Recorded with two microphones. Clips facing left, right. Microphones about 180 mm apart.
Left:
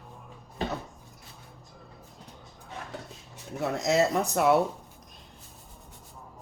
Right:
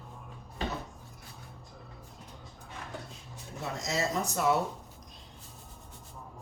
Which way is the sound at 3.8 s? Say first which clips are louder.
Left 7 dB; 65° left (ahead or behind).